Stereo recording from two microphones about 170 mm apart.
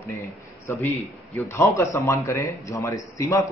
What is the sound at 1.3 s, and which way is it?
A man's voice, 15° left (ahead or behind).